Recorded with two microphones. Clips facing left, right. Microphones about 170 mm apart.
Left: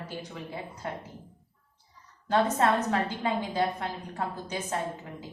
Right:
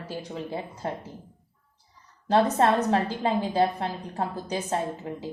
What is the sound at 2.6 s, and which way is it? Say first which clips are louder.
A woman's voice: right 4 dB; 30° right (ahead or behind).